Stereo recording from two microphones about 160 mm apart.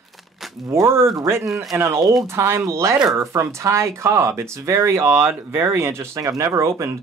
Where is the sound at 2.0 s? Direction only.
Centre (ahead or behind).